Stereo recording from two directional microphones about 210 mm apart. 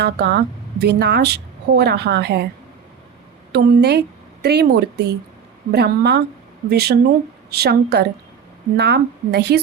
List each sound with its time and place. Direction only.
0.0 s a woman's voice: 50° right (ahead or behind)
3.5 s a woman's voice: 50° right (ahead or behind)